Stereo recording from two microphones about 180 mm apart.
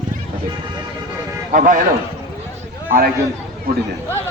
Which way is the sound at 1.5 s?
45° right (ahead or behind).